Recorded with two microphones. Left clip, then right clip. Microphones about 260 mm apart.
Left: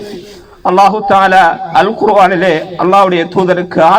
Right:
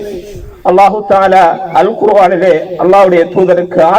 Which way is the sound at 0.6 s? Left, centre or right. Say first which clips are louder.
Right 1 dB; left.